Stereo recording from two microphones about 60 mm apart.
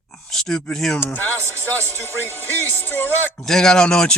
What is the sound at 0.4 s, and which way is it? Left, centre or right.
Speech, centre.